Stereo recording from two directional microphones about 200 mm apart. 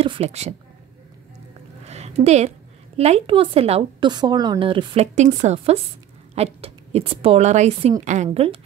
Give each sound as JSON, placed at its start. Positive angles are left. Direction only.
{"t": 0.0, "sound": "a woman's voice", "side_deg": -30}
{"t": 1.9, "sound": "a sound", "side_deg": -35}
{"t": 3.0, "sound": "a woman's voice", "side_deg": -30}